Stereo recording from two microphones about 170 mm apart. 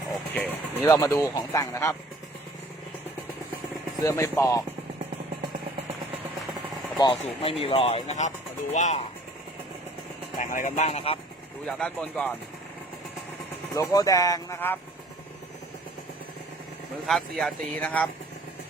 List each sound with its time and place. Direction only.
0.4 s music: 10° right (ahead or behind)
0.9 s speech: 20° left (ahead or behind)
4.0 s speech: 15° left (ahead or behind)
7.0 s speech: 30° left (ahead or behind)
10.3 s speech: 50° left (ahead or behind)
11.6 s speech: 5° left (ahead or behind)
13.7 s speech: 20° left (ahead or behind)
17.1 s speech: centre (ahead or behind)